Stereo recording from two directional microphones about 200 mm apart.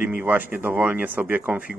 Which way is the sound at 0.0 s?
10° right (ahead or behind).